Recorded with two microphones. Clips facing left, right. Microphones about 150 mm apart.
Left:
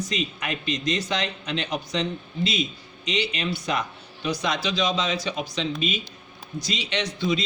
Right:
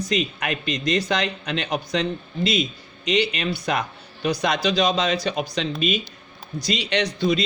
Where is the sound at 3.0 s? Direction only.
55° right (ahead or behind).